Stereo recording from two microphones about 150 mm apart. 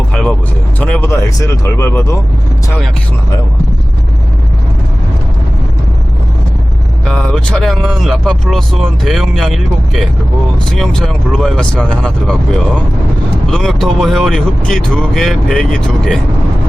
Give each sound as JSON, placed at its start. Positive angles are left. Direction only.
{"t": 0.1, "sound": "vehicle", "side_deg": 5}
{"t": 0.8, "sound": "speech", "side_deg": 10}
{"t": 7.0, "sound": "speech", "side_deg": 5}